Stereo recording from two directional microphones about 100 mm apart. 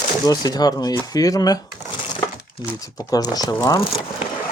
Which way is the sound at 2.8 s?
40° left (ahead or behind).